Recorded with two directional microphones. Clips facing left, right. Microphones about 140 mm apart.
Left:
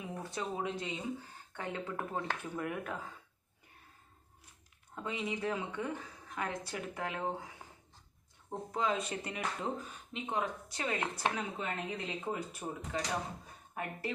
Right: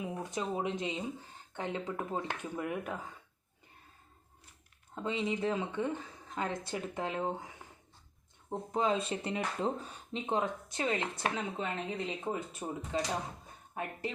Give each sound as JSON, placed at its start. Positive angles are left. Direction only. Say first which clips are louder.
{"t": 0.0, "sound": "speech", "louder": "right 3 dB", "side_deg": -15}
{"t": 4.9, "sound": "speech", "louder": "right 4 dB", "side_deg": -25}